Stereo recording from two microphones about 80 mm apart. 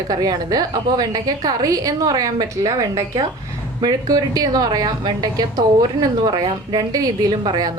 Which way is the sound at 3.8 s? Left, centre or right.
Right.